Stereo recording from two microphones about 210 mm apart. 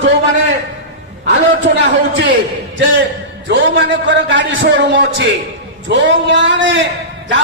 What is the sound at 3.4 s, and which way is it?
A man's voice, 60° right (ahead or behind).